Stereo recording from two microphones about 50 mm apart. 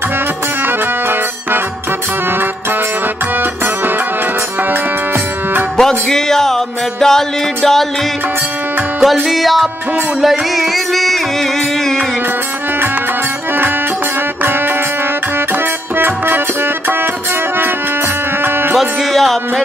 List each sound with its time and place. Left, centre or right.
0.7 s music: right
3.3 s music: right
5.8 s music: centre
9.0 s music: centre
15.3 s music: right
18.4 s music: right
18.8 s music: centre